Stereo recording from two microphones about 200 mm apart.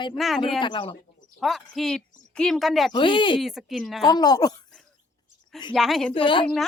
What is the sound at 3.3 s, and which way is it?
Speech, centre (ahead or behind).